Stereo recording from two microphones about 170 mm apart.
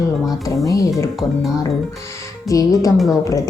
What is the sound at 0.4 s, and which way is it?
Speech, 20° left (ahead or behind).